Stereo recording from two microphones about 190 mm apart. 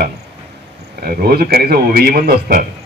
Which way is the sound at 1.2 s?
55° right (ahead or behind).